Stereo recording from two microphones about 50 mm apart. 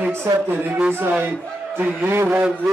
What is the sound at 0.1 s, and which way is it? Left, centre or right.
Speech, right.